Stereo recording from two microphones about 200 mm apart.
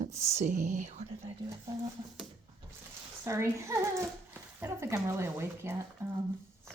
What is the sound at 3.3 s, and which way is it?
Speech, 15° right (ahead or behind).